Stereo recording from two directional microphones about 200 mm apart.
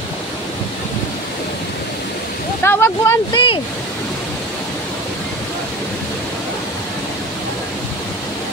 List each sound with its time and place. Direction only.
2.6 s speech: 10° left (ahead or behind)
3.3 s speech: 25° left (ahead or behind)